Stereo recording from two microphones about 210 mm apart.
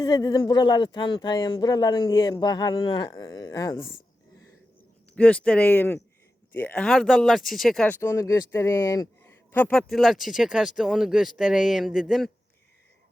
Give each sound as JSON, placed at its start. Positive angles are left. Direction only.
{"t": 0.0, "sound": "speech", "side_deg": 20}
{"t": 5.1, "sound": "speech", "side_deg": 5}